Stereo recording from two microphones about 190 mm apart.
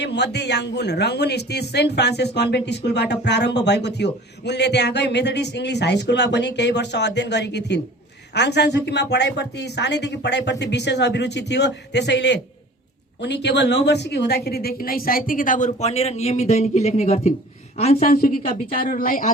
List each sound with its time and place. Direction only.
0.0 s a woman's voice: 65° left (ahead or behind); by 18.1 s 35° left (ahead or behind)
18.1 s a woman's voice: 50° left (ahead or behind)